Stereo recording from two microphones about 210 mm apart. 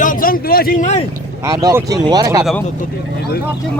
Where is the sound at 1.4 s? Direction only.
15° right (ahead or behind).